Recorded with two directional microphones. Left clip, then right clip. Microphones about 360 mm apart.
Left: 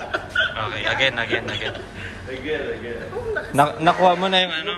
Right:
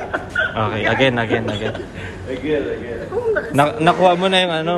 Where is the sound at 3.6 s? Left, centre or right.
Centre.